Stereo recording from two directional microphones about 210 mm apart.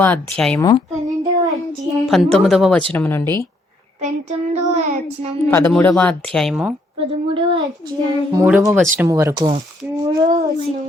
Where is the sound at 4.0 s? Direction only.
30° right (ahead or behind).